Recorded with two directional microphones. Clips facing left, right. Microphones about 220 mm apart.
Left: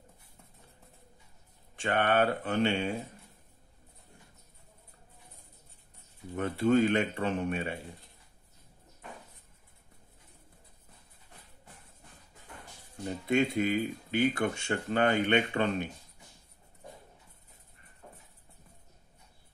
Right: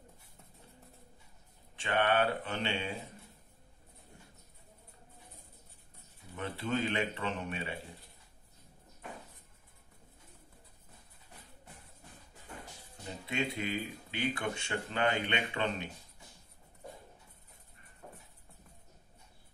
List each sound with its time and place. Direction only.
1.8 s speech: 45° left (ahead or behind)
6.3 s speech: 45° left (ahead or behind)
13.3 s speech: 45° left (ahead or behind)